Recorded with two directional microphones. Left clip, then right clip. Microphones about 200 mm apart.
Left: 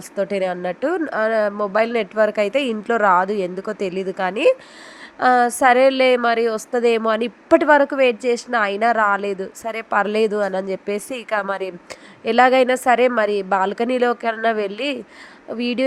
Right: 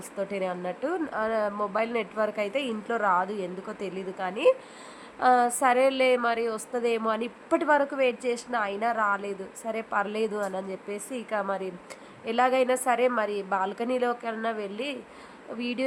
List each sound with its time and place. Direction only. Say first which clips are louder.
0.2 s a woman's voice: left 9 dB; 30° left (ahead or behind)